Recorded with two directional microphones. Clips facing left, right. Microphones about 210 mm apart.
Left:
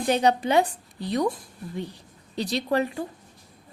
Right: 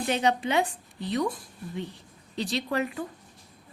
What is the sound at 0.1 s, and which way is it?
A woman's voice, 40° left (ahead or behind).